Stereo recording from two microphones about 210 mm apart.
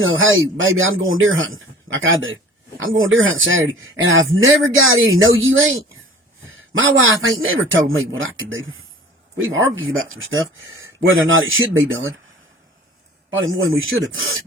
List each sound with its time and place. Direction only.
0.0 s a man's voice: 70° right (ahead or behind)
13.3 s a man's voice: 70° right (ahead or behind)